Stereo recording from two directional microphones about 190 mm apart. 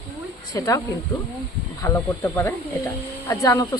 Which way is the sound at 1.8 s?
15° left (ahead or behind).